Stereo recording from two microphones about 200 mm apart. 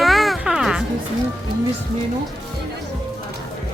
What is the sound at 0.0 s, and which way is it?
Music, centre (ahead or behind).